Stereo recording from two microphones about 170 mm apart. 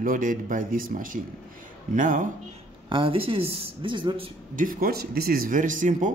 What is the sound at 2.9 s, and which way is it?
Speech, 30° right (ahead or behind).